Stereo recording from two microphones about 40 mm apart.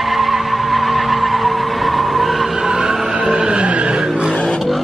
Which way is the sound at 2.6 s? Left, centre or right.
Centre.